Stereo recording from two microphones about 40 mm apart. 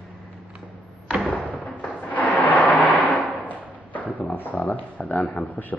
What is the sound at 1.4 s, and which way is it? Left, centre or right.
Thump, right.